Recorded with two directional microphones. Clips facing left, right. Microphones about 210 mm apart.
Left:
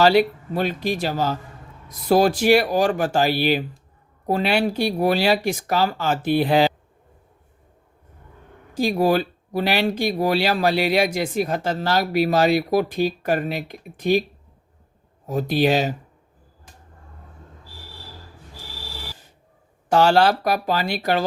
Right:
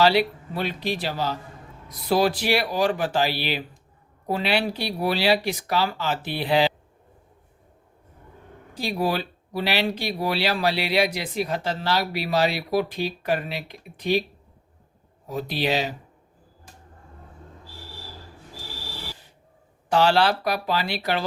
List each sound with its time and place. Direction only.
0.0 s speech: 45° left (ahead or behind)
8.7 s speech: 45° left (ahead or behind)
15.3 s speech: 45° left (ahead or behind)
19.9 s speech: 45° left (ahead or behind)